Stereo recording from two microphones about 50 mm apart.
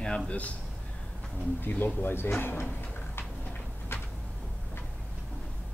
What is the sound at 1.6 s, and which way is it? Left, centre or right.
Speech, left.